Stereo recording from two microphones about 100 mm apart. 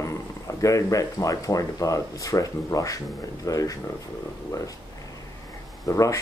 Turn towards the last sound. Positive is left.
turn(degrees=35)  # may be behind; listen again after turning